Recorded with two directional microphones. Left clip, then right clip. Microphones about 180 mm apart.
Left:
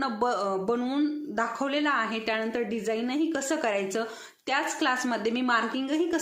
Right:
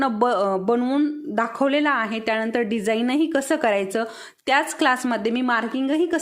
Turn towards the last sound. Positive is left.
turn(degrees=-40)  # may be behind; listen again after turning